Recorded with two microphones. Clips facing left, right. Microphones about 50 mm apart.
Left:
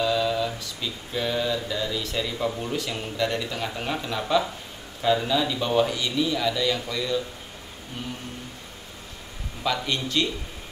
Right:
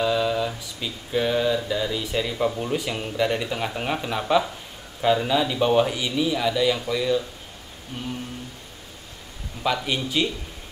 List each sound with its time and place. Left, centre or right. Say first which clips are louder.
0.0 s mantra: right 1 dB; centre
2.5 s a man's voice: right 3 dB; centre
9.6 s a man's voice: right 2 dB; centre